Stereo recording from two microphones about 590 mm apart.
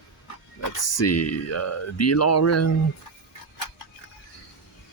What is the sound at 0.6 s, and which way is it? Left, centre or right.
Speech, left.